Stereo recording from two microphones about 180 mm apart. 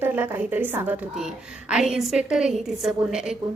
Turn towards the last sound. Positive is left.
turn(degrees=-5)  # may be behind; listen again after turning